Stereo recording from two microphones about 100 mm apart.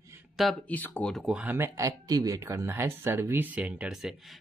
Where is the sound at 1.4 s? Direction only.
20° right (ahead or behind).